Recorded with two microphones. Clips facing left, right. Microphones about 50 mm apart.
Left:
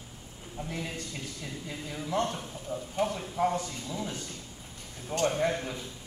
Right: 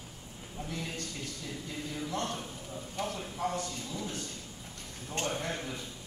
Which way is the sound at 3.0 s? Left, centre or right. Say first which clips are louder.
Left 7 dB; left.